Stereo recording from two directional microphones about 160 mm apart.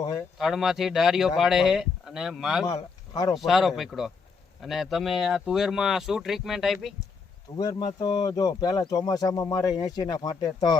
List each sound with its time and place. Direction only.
0.3 s speech: centre (ahead or behind)
7.5 s speech: 25° left (ahead or behind)